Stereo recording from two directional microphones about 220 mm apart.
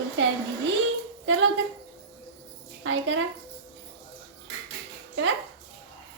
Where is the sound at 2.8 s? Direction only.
60° right (ahead or behind).